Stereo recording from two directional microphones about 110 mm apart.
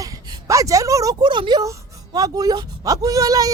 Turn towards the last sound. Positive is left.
turn(degrees=-35)  # may be behind; listen again after turning